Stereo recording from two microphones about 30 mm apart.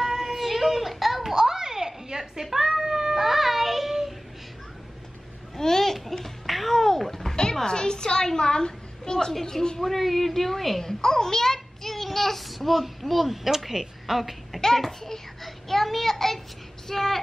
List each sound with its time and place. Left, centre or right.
0.0 s a sound: centre
1.3 s a sound: centre
2.4 s speech: centre
2.7 s cat: centre
5.6 s babbling: centre
6.4 s babbling: centre
6.7 s a sound: centre
7.6 s a woman's voice: left
9.3 s a woman's voice: centre
10.8 s a child's voice: centre
14.8 s child singing: centre
16.8 s speech: centre